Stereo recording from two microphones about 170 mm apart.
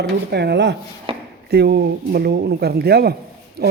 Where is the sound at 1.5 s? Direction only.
75° right (ahead or behind).